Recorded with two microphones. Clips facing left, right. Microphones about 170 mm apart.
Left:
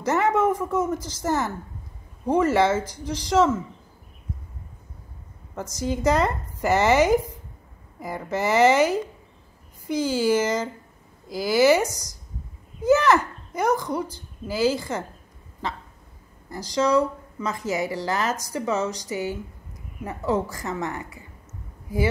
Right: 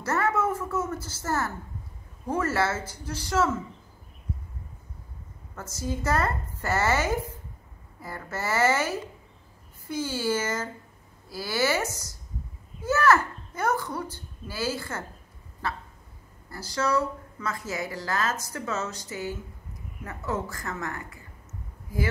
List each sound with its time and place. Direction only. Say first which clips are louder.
0.0 s speech: left 5 dB; 15° left (ahead or behind)
5.6 s speech: left 6 dB; 15° left (ahead or behind)
16.4 s speech: left 5 dB; 15° left (ahead or behind)